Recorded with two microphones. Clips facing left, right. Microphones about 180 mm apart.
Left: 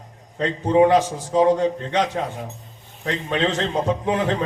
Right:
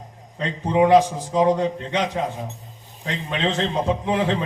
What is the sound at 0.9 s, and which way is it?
Speech, 35° right (ahead or behind).